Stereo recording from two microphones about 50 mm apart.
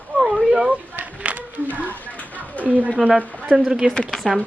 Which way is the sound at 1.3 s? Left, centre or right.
Right.